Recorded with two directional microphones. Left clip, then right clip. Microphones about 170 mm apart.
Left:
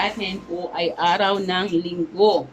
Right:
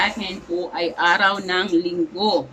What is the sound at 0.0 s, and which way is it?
Speech, 5° left (ahead or behind).